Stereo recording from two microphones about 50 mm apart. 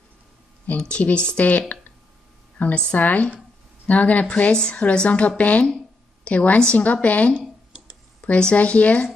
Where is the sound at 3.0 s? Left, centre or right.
Left.